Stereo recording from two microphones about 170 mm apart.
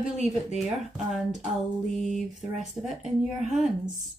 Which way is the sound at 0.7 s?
Centre (ahead or behind).